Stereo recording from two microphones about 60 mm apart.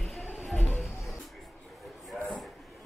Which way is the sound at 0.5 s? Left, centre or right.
Left.